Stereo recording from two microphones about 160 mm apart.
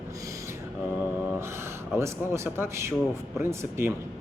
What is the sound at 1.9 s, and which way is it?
Speech, 15° right (ahead or behind).